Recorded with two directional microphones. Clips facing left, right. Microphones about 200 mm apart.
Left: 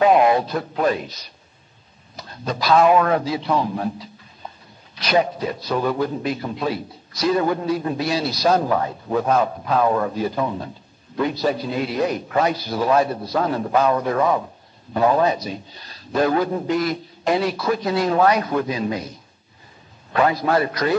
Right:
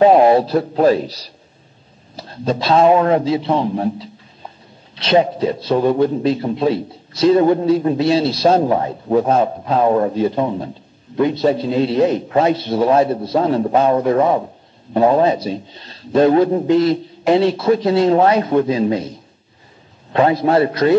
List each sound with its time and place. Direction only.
0.0 s a man's voice: 30° right (ahead or behind)
20.1 s a man's voice: 25° right (ahead or behind)